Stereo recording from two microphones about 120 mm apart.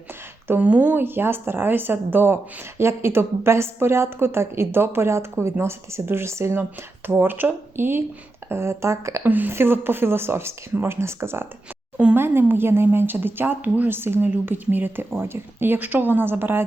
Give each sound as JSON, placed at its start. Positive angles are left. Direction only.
{"t": 0.4, "sound": "speech", "side_deg": -15}